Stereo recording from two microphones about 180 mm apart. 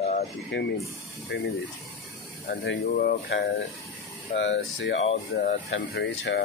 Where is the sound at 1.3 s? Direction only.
70° left (ahead or behind).